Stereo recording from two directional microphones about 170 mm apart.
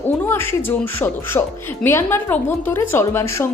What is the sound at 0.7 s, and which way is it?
Speech, 15° left (ahead or behind).